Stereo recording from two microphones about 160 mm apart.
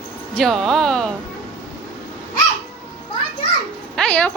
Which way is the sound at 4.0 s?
10° left (ahead or behind).